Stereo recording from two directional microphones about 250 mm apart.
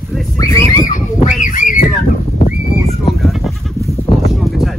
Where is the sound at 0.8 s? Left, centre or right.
Left.